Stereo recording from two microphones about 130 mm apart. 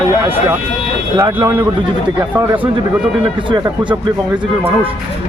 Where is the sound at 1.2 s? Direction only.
15° right (ahead or behind).